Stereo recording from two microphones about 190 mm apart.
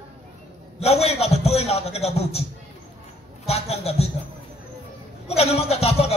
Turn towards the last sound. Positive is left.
turn(degrees=30)  # may be behind; listen again after turning